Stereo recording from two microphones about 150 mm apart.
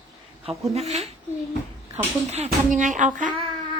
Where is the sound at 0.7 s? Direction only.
45° right (ahead or behind).